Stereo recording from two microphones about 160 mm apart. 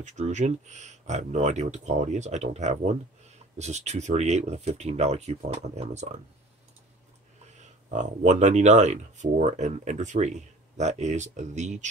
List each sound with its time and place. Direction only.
0.0 s speech: 50° right (ahead or behind)
7.6 s speech: 50° right (ahead or behind)